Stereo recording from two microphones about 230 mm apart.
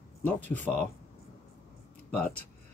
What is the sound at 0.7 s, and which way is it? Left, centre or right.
Speech, centre.